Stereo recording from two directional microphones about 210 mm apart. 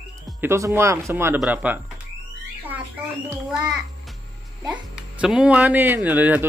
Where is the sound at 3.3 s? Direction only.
5° right (ahead or behind).